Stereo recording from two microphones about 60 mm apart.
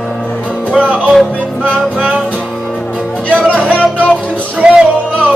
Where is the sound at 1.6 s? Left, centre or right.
Centre.